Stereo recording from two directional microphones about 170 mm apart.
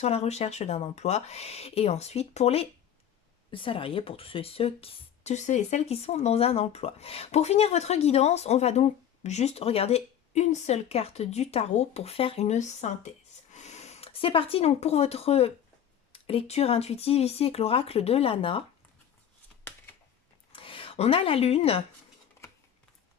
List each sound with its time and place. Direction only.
0.0 s speech: 40° left (ahead or behind)
20.5 s speech: 30° left (ahead or behind)